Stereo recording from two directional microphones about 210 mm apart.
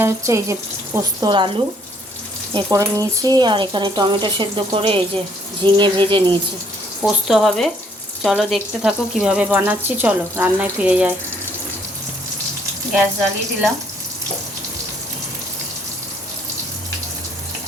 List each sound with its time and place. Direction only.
0.0 s speech: 15° right (ahead or behind)
7.0 s speech: 5° right (ahead or behind)